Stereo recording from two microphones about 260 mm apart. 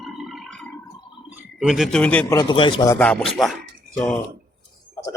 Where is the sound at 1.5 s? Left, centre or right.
Centre.